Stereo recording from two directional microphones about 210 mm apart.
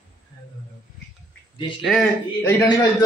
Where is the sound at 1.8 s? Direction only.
Centre (ahead or behind).